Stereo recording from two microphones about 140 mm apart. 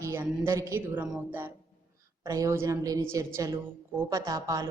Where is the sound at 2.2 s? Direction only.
25° right (ahead or behind).